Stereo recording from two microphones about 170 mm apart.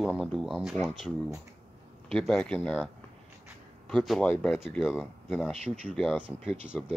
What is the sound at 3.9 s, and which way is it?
Speech, centre (ahead or behind).